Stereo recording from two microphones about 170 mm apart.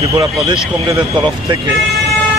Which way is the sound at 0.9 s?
30° right (ahead or behind).